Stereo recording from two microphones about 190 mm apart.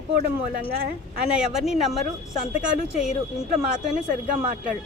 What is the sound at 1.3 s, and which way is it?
Speech, centre (ahead or behind).